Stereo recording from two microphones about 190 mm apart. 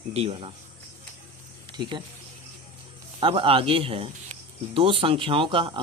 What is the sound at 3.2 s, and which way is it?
Speech, 30° right (ahead or behind).